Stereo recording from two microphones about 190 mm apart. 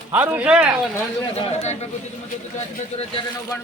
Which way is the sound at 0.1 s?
10° right (ahead or behind).